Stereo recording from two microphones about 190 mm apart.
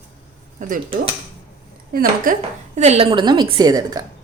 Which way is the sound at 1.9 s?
50° right (ahead or behind).